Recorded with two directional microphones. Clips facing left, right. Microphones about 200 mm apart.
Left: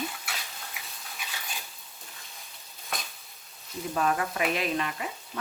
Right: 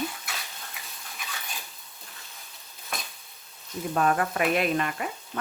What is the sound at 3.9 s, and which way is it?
Speech, 50° right (ahead or behind).